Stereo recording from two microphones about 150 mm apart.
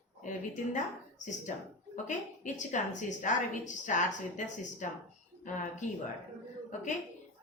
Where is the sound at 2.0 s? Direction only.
55° left (ahead or behind).